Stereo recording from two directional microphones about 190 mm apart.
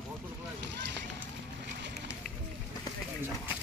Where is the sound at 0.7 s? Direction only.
70° right (ahead or behind).